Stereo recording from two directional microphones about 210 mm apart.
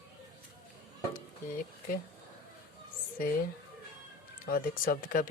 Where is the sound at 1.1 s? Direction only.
40° left (ahead or behind).